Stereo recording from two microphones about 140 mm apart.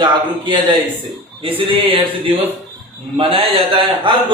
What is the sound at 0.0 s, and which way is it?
A man's voice, 35° right (ahead or behind).